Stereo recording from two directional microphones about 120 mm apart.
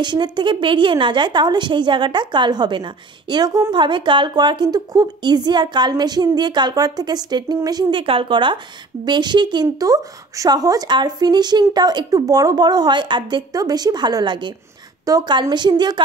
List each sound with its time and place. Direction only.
0.0 s a woman's voice: 40° right (ahead or behind)
8.0 s a woman's voice: 50° right (ahead or behind)